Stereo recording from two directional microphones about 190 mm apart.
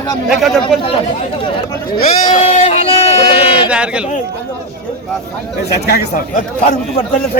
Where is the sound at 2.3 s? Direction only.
35° left (ahead or behind).